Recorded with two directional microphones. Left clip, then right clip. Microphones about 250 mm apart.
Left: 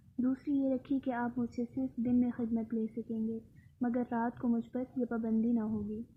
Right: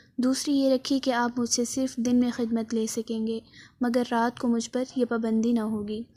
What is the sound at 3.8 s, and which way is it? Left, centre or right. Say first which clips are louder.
Speech: right 10 dB; right.